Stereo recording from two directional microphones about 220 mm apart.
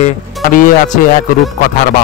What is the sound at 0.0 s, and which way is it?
A man's voice, 40° left (ahead or behind).